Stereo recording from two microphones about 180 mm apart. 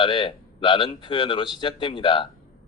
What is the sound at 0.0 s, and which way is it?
Speech, 30° left (ahead or behind).